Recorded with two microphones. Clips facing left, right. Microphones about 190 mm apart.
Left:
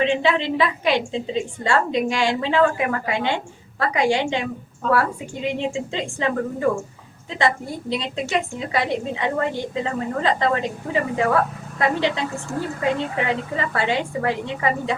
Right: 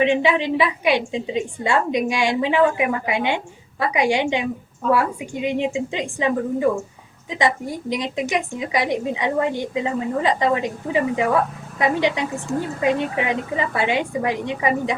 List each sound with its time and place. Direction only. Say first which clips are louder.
0.0 s a woman's voice: right 2 dB; 15° right (ahead or behind)